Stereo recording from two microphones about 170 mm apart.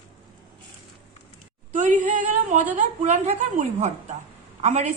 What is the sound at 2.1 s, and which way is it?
A woman's voice, 45° right (ahead or behind).